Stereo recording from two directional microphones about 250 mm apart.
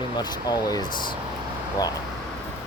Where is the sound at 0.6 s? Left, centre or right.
Centre.